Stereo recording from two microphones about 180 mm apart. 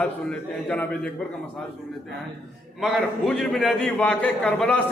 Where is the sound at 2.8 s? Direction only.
Centre (ahead or behind).